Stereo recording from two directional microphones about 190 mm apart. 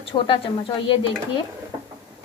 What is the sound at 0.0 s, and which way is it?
Dishes, 30° left (ahead or behind).